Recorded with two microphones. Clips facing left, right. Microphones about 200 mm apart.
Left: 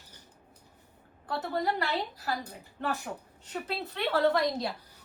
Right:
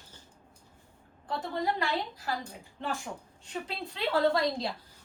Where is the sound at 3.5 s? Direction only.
20° left (ahead or behind).